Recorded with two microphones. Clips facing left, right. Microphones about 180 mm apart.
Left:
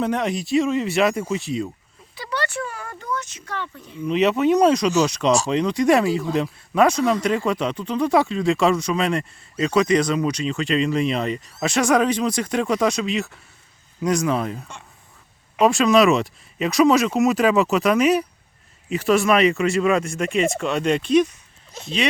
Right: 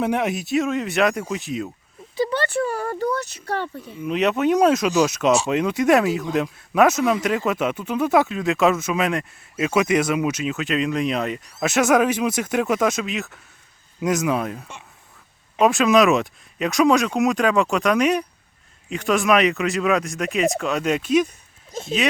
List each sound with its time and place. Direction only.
0.0 s speech: 10° right (ahead or behind)
2.3 s speech: 30° right (ahead or behind)
3.8 s speech: 5° right (ahead or behind)